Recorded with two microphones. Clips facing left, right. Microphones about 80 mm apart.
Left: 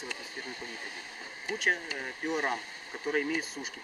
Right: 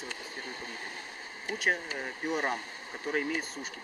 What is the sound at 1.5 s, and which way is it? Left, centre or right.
Speech, centre.